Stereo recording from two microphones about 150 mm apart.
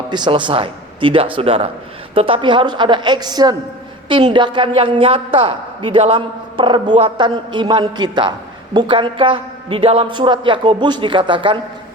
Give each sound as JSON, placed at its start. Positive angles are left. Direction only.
{"t": 0.1, "sound": "a woman's voice", "side_deg": -30}